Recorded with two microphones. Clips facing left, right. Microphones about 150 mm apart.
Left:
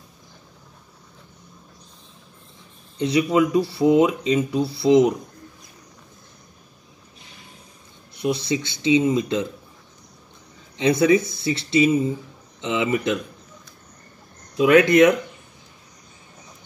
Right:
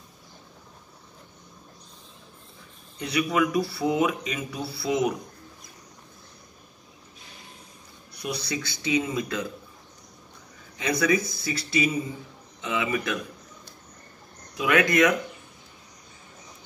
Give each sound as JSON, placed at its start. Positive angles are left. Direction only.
{"t": 3.0, "sound": "speech", "side_deg": 25}
{"t": 8.1, "sound": "speech", "side_deg": 25}
{"t": 10.8, "sound": "speech", "side_deg": 25}
{"t": 14.6, "sound": "speech", "side_deg": 30}